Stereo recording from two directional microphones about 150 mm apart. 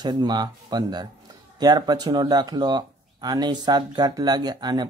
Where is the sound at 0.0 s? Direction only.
30° right (ahead or behind).